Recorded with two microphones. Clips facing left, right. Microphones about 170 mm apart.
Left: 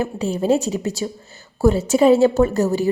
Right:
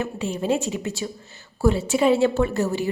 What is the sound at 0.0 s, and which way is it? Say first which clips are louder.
A woman's voice: left 5 dB; 35° left (ahead or behind).